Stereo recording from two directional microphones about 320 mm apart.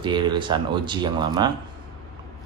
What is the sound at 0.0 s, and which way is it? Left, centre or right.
Speech, centre.